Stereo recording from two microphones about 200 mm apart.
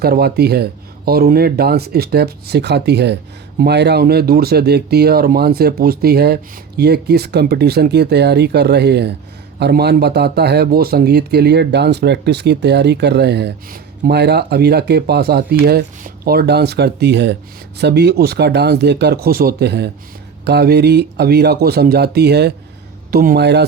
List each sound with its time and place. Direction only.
0.0 s speech: 50° right (ahead or behind)